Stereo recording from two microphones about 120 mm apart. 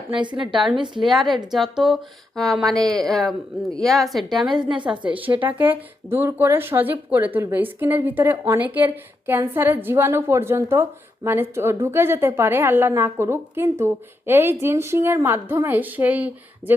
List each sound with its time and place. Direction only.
0.1 s a woman's voice: 40° right (ahead or behind)
1.0 s speech: centre (ahead or behind)
4.6 s a woman's voice: 40° right (ahead or behind)
6.1 s speech: 20° right (ahead or behind)